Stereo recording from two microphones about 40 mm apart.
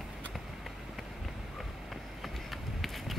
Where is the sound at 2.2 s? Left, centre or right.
Centre.